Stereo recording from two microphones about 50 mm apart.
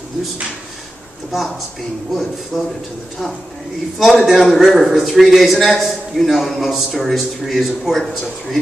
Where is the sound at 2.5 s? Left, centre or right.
Centre.